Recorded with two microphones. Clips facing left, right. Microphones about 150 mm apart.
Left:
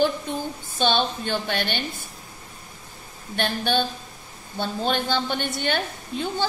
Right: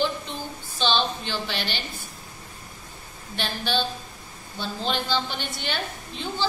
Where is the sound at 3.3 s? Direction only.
55° left (ahead or behind).